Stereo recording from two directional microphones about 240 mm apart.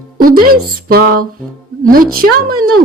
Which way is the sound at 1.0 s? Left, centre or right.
Right.